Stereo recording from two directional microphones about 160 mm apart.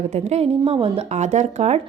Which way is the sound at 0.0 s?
45° right (ahead or behind).